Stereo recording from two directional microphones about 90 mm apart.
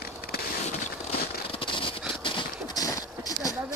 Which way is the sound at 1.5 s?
80° left.